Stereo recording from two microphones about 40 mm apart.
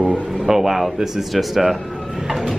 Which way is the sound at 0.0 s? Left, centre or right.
Right.